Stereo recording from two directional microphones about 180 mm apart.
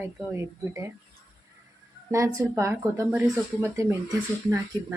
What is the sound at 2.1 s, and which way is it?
Speech, 15° right (ahead or behind).